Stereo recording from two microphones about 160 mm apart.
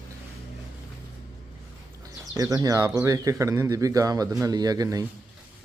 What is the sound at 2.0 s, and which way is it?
Speech, 20° right (ahead or behind).